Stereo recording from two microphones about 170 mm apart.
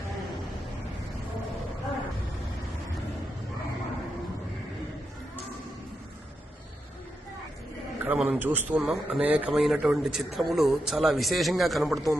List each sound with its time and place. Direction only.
8.0 s a man's voice: 10° right (ahead or behind)